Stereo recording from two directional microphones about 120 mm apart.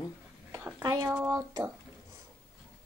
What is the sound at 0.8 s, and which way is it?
Speech, 35° right (ahead or behind).